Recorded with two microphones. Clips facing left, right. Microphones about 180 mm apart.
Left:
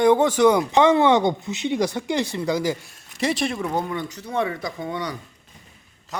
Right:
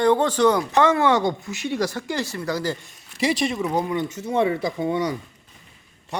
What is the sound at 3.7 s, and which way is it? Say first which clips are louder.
Speech: right 2 dB; 15° right (ahead or behind).